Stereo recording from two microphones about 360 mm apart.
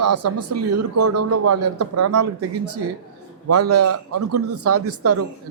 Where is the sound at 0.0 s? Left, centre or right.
Right.